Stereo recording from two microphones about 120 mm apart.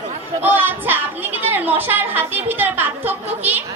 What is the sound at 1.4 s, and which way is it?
A woman's voice, 15° right (ahead or behind).